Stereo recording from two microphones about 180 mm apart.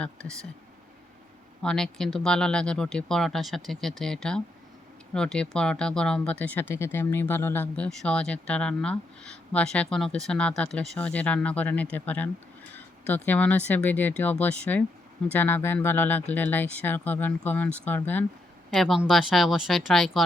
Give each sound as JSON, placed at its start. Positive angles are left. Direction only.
{"t": 0.0, "sound": "speech", "side_deg": 5}
{"t": 1.6, "sound": "speech", "side_deg": 5}